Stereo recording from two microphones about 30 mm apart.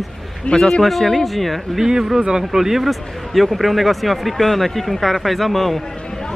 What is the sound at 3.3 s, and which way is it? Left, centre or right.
Speech, centre.